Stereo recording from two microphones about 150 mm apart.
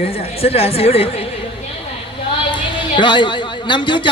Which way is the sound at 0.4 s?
40° left (ahead or behind).